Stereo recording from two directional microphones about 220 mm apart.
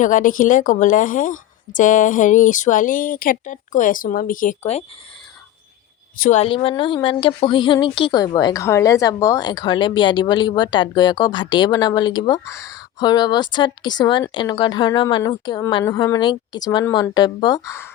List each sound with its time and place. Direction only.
0.0 s a woman's voice: 35° left (ahead or behind)
6.1 s a woman's voice: 40° left (ahead or behind)
6.4 s speech: 25° left (ahead or behind)